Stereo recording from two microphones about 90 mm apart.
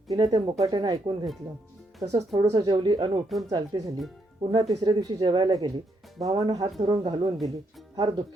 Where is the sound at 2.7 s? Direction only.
60° right (ahead or behind).